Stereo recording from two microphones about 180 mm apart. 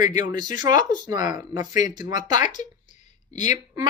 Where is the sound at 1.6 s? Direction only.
45° left (ahead or behind).